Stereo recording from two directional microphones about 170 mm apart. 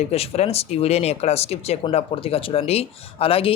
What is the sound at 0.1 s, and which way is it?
Speech, 35° left (ahead or behind).